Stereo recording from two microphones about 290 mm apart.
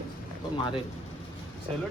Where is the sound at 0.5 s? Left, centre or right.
Centre.